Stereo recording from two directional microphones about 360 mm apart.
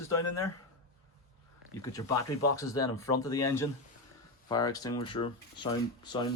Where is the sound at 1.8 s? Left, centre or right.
Centre.